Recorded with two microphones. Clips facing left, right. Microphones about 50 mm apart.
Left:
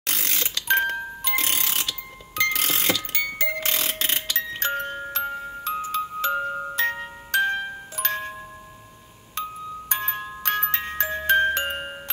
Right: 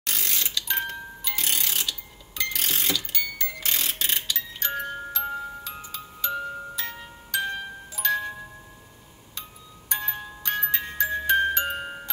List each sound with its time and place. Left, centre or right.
0.0 s music: left
6.3 s glockenspiel: left
9.8 s glockenspiel: left